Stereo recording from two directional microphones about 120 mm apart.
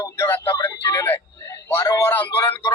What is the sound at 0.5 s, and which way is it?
Speech, 30° left (ahead or behind).